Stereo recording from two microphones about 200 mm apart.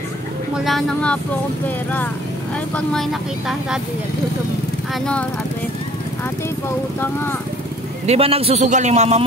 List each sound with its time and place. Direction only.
0.6 s speech: centre (ahead or behind)
2.7 s speech: centre (ahead or behind)
8.1 s a man's voice: 30° right (ahead or behind)